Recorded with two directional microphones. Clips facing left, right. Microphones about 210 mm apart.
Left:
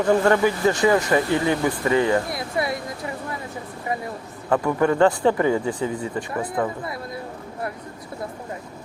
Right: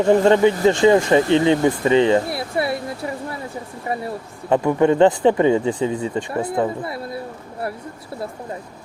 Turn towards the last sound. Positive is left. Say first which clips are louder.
# right 4 dB
turn(degrees=-30)  # may be behind; listen again after turning